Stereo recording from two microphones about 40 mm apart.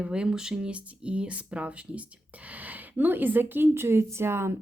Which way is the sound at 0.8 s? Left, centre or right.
Right.